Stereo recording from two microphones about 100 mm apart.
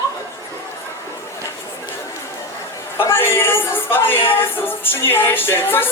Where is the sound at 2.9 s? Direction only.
25° left (ahead or behind).